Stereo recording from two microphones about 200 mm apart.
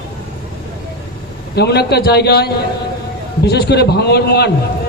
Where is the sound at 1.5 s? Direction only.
55° left (ahead or behind).